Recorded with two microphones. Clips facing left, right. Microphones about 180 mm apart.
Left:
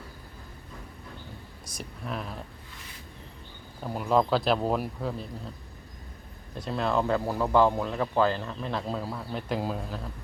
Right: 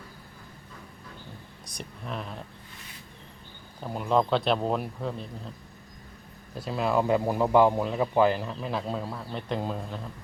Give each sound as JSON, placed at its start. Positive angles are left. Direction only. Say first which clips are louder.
{"t": 1.6, "sound": "speech", "louder": "left 1 dB", "side_deg": 0}
{"t": 3.8, "sound": "speech", "louder": "even", "side_deg": 0}
{"t": 6.5, "sound": "speech", "louder": "right 1 dB", "side_deg": -5}